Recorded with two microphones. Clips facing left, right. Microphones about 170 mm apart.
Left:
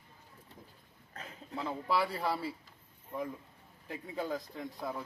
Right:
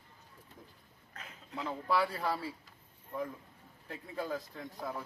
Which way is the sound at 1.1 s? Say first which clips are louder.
Left 2 dB; 35° left (ahead or behind).